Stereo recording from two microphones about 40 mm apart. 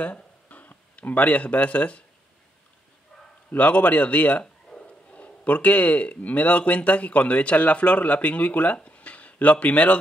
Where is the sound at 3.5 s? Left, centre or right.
Left.